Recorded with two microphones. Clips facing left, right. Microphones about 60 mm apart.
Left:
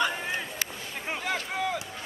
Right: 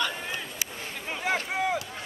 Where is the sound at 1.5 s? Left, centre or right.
Centre.